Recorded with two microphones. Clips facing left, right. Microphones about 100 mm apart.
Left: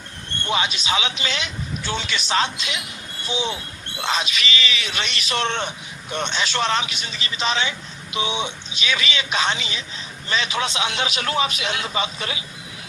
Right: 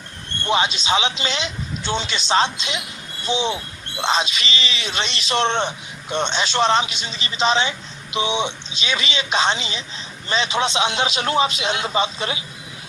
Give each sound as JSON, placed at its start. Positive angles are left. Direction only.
{"t": 0.4, "sound": "speech", "side_deg": -30}